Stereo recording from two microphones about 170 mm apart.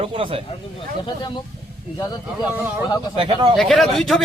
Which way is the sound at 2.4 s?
10° right (ahead or behind).